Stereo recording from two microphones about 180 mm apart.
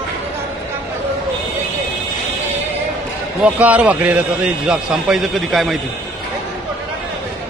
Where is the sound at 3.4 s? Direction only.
10° right (ahead or behind).